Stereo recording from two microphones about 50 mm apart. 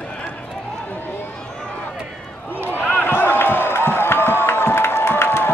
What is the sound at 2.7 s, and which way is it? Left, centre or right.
Basketball bounce, left.